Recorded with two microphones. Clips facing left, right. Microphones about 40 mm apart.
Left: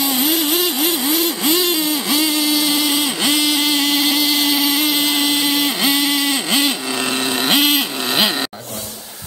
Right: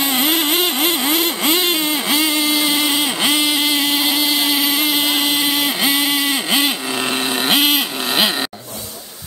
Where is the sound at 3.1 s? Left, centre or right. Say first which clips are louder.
Even; centre.